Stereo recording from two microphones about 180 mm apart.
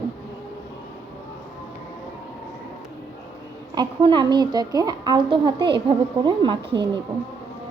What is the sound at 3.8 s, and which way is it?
A woman's voice, 25° right (ahead or behind).